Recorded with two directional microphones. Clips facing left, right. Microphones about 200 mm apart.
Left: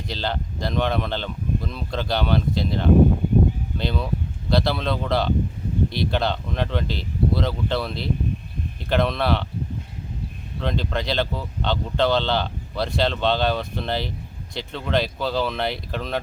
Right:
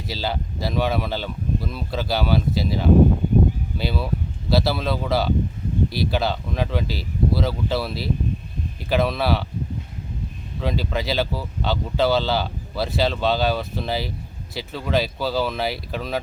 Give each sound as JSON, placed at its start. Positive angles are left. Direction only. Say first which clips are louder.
{"t": 0.1, "sound": "speech", "louder": "right 1 dB", "side_deg": -5}
{"t": 10.6, "sound": "speech", "louder": "right 1 dB", "side_deg": -5}